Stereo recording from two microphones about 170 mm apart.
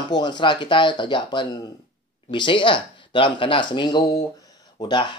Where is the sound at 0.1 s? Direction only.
25° left (ahead or behind).